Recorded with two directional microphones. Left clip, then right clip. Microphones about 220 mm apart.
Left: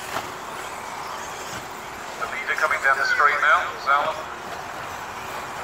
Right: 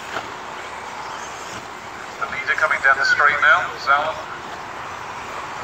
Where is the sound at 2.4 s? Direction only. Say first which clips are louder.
Right 4 dB; 45° right (ahead or behind).